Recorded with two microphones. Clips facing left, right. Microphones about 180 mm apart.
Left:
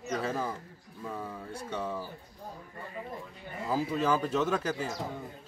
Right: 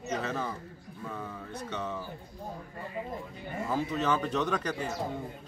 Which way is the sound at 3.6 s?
10° left (ahead or behind).